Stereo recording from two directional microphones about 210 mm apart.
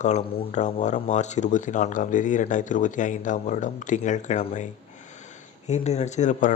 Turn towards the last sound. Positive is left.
turn(degrees=35)  # may be behind; listen again after turning